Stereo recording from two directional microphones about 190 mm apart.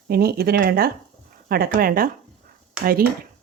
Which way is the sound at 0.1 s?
55° right (ahead or behind).